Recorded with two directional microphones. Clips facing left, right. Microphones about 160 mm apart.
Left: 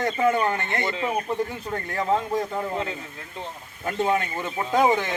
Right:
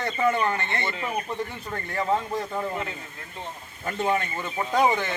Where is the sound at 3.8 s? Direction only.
15° left (ahead or behind).